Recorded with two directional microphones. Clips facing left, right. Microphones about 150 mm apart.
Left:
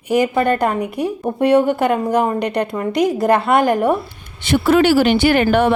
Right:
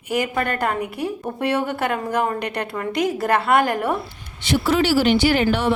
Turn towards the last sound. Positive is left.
turn(degrees=55)  # may be behind; listen again after turning